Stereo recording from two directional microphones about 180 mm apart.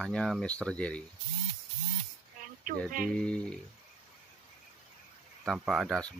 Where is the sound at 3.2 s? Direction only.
5° left (ahead or behind).